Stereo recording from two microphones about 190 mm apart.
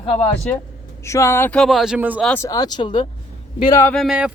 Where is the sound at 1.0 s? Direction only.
15° left (ahead or behind); by 2.2 s 10° right (ahead or behind).